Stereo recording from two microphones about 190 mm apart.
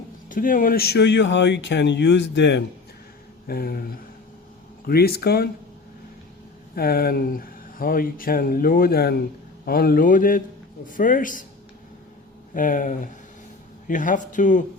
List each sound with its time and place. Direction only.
0.3 s speech: 45° left (ahead or behind); by 2.6 s 65° left (ahead or behind)
3.4 s speech: 55° left (ahead or behind)
6.7 s speech: 55° left (ahead or behind)
12.5 s speech: 45° left (ahead or behind)